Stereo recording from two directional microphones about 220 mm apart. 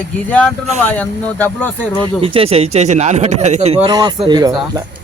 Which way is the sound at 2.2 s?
25° right (ahead or behind).